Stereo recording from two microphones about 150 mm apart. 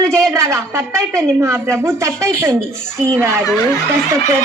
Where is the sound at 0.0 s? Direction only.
20° right (ahead or behind).